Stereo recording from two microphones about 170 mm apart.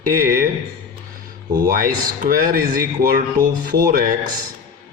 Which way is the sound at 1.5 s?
60° right (ahead or behind).